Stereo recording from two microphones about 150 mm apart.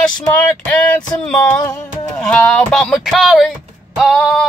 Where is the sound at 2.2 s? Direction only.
5° left (ahead or behind).